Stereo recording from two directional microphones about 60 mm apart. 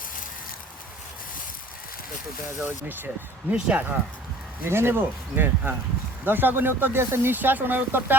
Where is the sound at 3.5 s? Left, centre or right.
Right.